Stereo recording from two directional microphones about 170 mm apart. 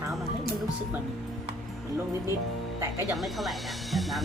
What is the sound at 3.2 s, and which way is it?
Speech, centre (ahead or behind).